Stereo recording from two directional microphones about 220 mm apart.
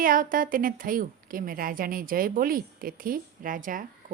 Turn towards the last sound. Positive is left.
turn(degrees=-35)  # may be behind; listen again after turning